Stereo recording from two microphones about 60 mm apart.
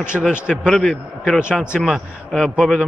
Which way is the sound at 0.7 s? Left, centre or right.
Centre.